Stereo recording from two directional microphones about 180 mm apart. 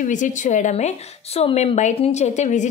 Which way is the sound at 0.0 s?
45° left (ahead or behind).